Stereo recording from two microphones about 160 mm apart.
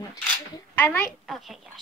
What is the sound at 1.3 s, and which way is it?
Speech, centre (ahead or behind).